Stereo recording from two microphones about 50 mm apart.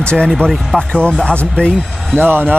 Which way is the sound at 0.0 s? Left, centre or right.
Centre.